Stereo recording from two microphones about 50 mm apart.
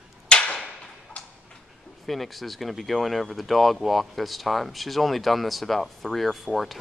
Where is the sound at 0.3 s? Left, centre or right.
Left.